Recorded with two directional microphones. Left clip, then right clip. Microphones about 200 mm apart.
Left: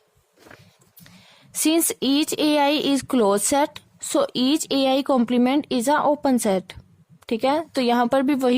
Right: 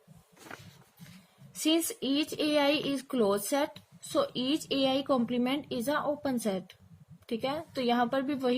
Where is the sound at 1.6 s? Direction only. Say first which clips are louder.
Left 8 dB; 50° left (ahead or behind).